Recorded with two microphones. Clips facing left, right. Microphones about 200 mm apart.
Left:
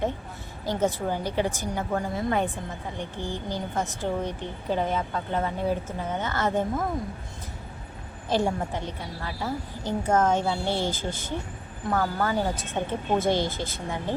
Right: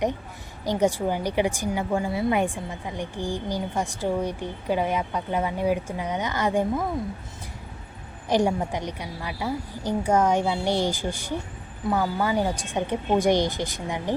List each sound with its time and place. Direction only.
0.6 s a woman's voice: 15° right (ahead or behind)
8.3 s a woman's voice: 15° right (ahead or behind)